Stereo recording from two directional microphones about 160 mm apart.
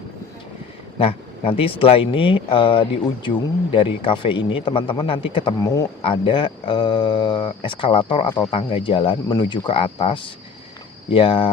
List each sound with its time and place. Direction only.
0.9 s speech: 35° left (ahead or behind)